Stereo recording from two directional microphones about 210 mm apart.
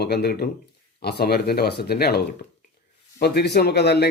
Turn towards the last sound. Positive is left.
turn(degrees=50)  # may be behind; listen again after turning